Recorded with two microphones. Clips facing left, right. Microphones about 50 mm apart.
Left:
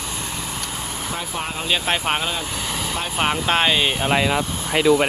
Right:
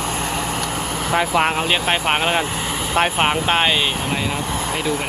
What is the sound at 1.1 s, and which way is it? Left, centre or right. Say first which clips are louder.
Speech: right 12 dB; right.